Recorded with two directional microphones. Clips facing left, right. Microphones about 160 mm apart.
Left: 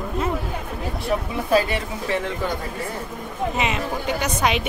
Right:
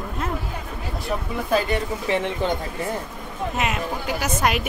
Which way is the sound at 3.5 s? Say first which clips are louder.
Right 1 dB; centre (ahead or behind).